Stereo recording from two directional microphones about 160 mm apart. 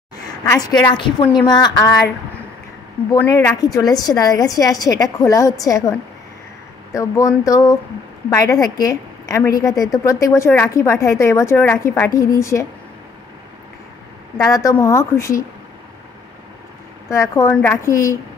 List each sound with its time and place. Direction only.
0.5 s a woman's voice: 25° left (ahead or behind)
3.1 s a woman's voice: 15° left (ahead or behind)
7.0 s a woman's voice: 20° left (ahead or behind)
14.5 s a woman's voice: 20° left (ahead or behind)
17.1 s a woman's voice: 20° left (ahead or behind)